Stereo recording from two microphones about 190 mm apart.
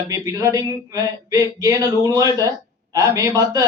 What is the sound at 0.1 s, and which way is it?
A man's voice, 15° right (ahead or behind).